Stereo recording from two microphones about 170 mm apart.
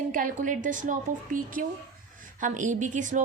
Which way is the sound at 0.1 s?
50° right (ahead or behind).